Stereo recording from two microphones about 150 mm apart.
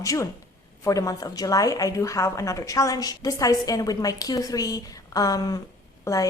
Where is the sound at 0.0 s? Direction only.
20° left (ahead or behind).